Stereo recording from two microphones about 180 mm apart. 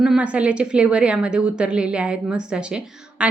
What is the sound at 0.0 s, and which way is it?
A woman's voice, 5° right (ahead or behind).